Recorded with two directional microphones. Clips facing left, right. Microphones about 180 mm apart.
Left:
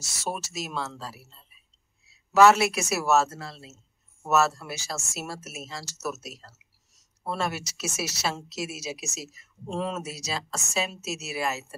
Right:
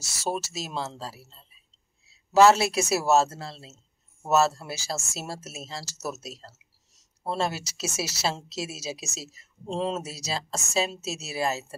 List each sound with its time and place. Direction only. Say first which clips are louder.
0.2 s speech: right 2 dB; 30° right (ahead or behind)